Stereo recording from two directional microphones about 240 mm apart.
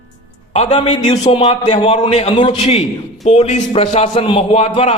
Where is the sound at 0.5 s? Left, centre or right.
Left.